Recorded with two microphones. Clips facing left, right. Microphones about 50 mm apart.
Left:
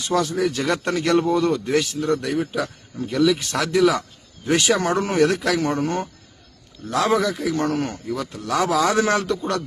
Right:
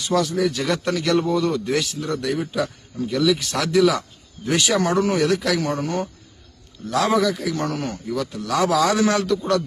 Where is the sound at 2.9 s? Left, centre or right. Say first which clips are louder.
Left 1 dB; centre.